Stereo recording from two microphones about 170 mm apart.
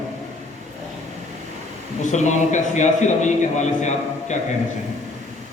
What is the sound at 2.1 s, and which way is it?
A man's voice, 45° left (ahead or behind).